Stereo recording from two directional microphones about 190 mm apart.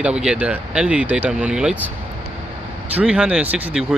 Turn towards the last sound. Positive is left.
turn(degrees=-5)  # may be behind; listen again after turning